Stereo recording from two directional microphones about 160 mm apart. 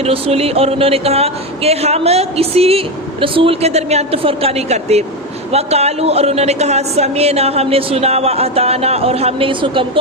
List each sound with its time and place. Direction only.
0.0 s speech: 40° right (ahead or behind)